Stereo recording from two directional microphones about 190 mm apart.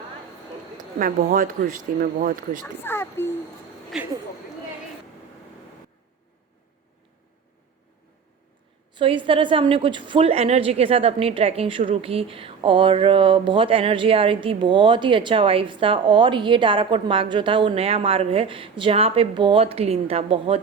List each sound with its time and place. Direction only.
0.9 s speech: 40° right (ahead or behind)
2.8 s a child's voice: 10° left (ahead or behind)
3.9 s speech: centre (ahead or behind)
9.0 s a woman's voice: 25° right (ahead or behind)